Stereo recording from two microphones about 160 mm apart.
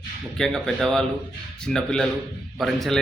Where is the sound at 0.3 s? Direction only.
5° left (ahead or behind).